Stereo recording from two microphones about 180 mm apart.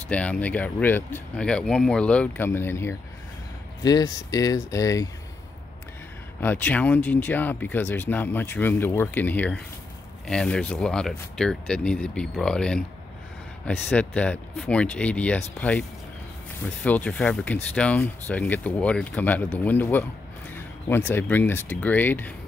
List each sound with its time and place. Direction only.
0.1 s speech: 5° left (ahead or behind)
6.4 s speech: 10° left (ahead or behind)
16.6 s speech: 10° left (ahead or behind)